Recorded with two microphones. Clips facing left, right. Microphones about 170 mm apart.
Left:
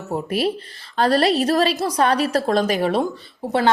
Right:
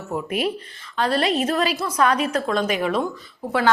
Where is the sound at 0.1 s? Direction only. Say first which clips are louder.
Left 2 dB; 35° left (ahead or behind).